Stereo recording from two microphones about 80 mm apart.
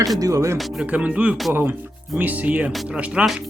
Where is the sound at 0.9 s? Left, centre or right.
Centre.